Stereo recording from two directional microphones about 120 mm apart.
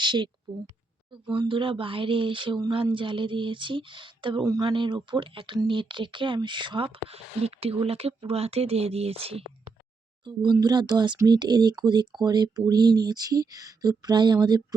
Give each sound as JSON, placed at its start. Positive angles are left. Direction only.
{"t": 0.0, "sound": "a woman's voice", "side_deg": -40}
{"t": 10.2, "sound": "speech", "side_deg": -40}